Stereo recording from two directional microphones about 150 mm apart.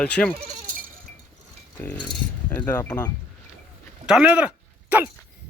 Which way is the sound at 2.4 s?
15° left (ahead or behind).